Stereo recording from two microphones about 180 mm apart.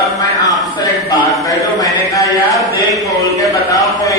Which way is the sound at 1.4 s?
20° left (ahead or behind).